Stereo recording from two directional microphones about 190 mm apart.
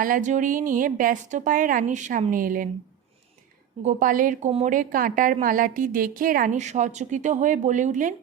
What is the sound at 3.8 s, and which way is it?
A woman's voice, 40° right (ahead or behind).